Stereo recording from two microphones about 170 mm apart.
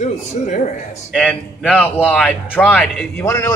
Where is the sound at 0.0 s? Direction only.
45° left (ahead or behind).